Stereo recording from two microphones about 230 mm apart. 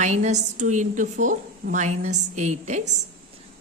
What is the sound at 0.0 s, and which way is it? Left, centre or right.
A woman's voice, right.